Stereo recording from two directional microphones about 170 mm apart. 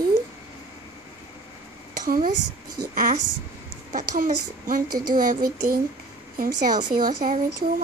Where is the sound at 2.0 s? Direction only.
55° right (ahead or behind).